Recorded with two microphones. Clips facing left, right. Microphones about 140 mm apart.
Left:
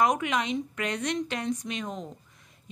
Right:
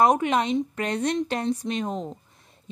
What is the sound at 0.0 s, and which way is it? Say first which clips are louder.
A woman's voice: right 5 dB; 35° right (ahead or behind).